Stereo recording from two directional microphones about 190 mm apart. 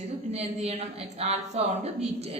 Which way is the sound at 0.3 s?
35° right (ahead or behind).